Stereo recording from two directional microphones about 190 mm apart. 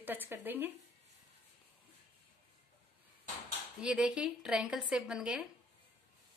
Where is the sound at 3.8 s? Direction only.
5° right (ahead or behind).